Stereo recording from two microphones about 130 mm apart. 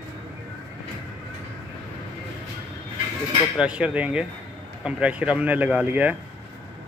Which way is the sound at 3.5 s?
10° right (ahead or behind).